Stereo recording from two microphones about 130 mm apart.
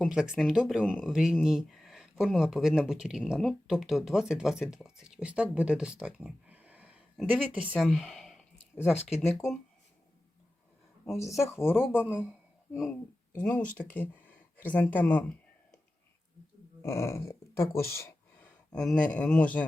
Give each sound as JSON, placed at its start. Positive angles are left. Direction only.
{"t": 0.1, "sound": "speech", "side_deg": -5}
{"t": 8.7, "sound": "speech", "side_deg": 15}
{"t": 11.3, "sound": "speech", "side_deg": 0}
{"t": 11.5, "sound": "speech", "side_deg": 15}
{"t": 16.8, "sound": "speech", "side_deg": 20}
{"t": 18.7, "sound": "speech", "side_deg": 5}